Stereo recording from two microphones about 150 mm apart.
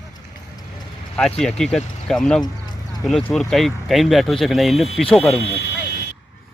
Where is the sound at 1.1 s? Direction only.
5° left (ahead or behind).